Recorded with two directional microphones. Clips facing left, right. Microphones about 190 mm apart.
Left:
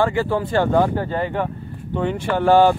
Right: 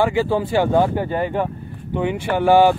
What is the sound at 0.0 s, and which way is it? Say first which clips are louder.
Speech: right 1 dB; 15° right (ahead or behind).